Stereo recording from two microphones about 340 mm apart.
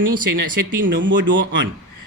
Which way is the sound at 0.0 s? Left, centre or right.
Right.